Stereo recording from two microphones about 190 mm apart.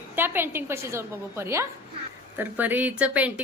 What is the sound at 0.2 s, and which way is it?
A woman's voice, 10° right (ahead or behind).